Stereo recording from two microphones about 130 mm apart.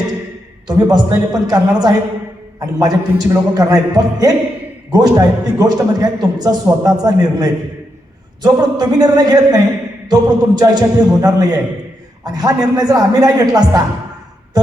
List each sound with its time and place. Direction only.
0.7 s a man's voice: 30° right (ahead or behind)